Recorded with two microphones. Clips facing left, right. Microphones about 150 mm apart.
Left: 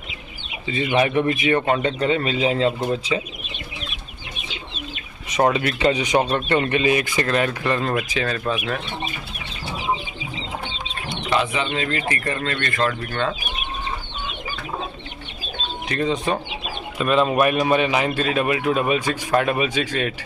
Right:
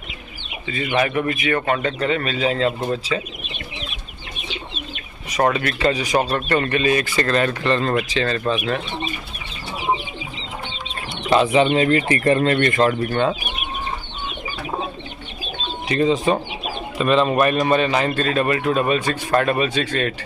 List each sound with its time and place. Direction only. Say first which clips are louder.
0.7 s a man's voice: left 1 dB; 20° left (ahead or behind)
5.3 s a man's voice: even; 20° left (ahead or behind)
11.2 s speech: right 7 dB; 25° right (ahead or behind)
15.9 s a man's voice: right 5 dB; centre (ahead or behind)